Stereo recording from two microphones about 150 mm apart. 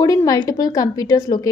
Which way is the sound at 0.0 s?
25° left (ahead or behind).